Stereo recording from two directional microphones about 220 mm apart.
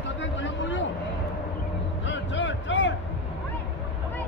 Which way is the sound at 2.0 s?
55° left (ahead or behind).